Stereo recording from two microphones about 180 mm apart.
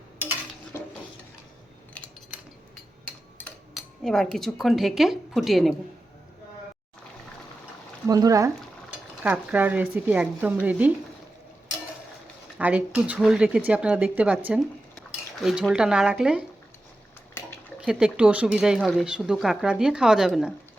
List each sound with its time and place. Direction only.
0.7 s dishes: 10° left (ahead or behind)
2.0 s cutlery: 5° left (ahead or behind)
3.3 s speech: centre (ahead or behind)
8.0 s speech: 20° right (ahead or behind)
9.2 s speech: 10° right (ahead or behind)
12.5 s speech: 10° right (ahead or behind)
17.7 s speech: 5° right (ahead or behind)